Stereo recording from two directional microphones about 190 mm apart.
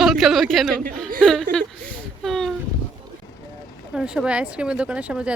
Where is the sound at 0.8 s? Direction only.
45° right (ahead or behind).